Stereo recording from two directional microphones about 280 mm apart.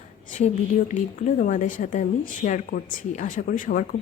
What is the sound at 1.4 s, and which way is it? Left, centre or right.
Speech, left.